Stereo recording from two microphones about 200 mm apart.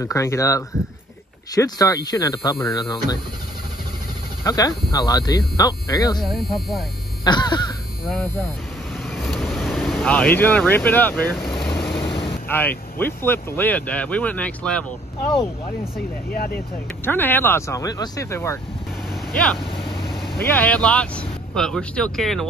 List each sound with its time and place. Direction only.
0.0 s speech: 15° left (ahead or behind)
4.5 s speech: 15° left (ahead or behind)
6.2 s speech: centre (ahead or behind)
7.2 s speech: 20° left (ahead or behind)
8.0 s speech: centre (ahead or behind)
9.0 s vehicle: centre (ahead or behind)
10.3 s speech: 10° left (ahead or behind)
17.0 s speech: 10° left (ahead or behind)
20.1 s speech: 5° left (ahead or behind)